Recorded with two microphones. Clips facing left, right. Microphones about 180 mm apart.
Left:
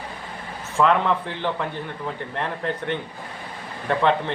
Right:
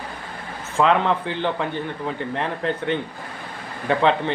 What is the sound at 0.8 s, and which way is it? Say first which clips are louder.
Speech: right 1 dB; 15° right (ahead or behind).